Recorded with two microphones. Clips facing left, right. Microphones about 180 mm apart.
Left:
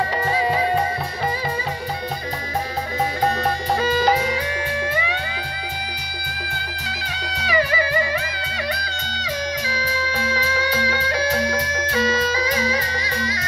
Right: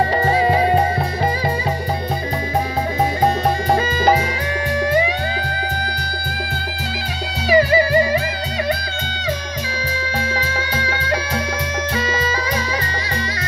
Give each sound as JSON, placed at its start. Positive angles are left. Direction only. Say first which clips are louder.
{"t": 0.3, "sound": "music", "louder": "right 4 dB", "side_deg": -35}
{"t": 3.7, "sound": "music", "louder": "right 1 dB", "side_deg": -50}
{"t": 7.4, "sound": "music", "louder": "right 7 dB", "side_deg": -35}
{"t": 10.3, "sound": "music", "louder": "left 1 dB", "side_deg": -50}